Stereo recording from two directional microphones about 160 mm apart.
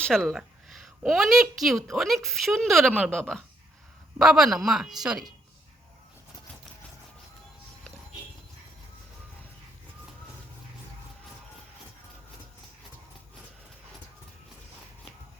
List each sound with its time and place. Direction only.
0.0 s a woman's voice: 5° left (ahead or behind)